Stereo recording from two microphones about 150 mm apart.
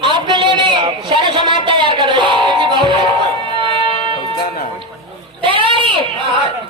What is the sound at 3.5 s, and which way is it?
Music, 35° right (ahead or behind).